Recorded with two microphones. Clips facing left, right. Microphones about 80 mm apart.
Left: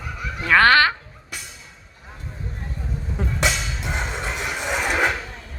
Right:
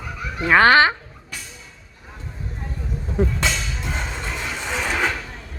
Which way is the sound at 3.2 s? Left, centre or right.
Centre.